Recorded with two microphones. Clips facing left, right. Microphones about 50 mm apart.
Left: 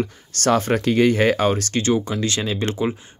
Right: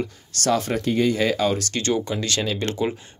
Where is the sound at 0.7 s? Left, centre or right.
Left.